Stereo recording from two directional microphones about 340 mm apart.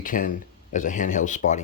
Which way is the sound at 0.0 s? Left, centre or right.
Left.